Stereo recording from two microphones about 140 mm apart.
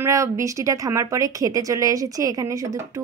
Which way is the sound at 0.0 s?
20° right (ahead or behind).